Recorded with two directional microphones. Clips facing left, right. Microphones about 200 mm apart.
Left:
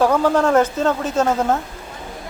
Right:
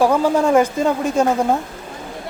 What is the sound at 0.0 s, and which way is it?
Speech, 10° right (ahead or behind).